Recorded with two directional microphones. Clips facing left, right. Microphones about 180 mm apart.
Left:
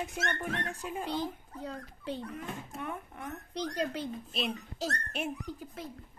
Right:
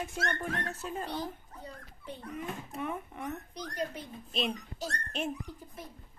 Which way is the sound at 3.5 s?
90° left.